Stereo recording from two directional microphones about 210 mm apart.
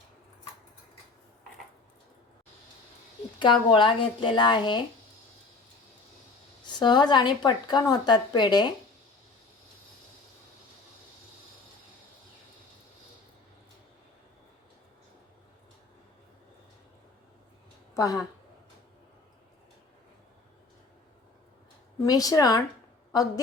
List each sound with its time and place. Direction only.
3.3 s a woman's voice: 20° left (ahead or behind)
6.7 s a woman's voice: 20° left (ahead or behind)
17.9 s a sound: 15° left (ahead or behind)
22.0 s speech: 15° left (ahead or behind)